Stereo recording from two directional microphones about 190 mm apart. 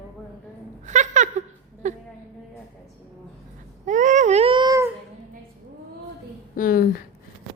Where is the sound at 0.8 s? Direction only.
40° right (ahead or behind).